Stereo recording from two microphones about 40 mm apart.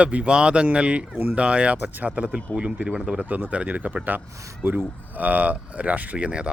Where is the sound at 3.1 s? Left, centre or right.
Right.